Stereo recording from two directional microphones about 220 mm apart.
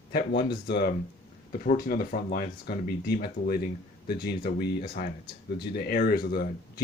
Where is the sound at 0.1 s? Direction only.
45° left (ahead or behind).